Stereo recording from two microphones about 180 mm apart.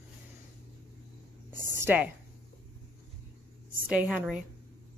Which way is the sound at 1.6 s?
10° right (ahead or behind).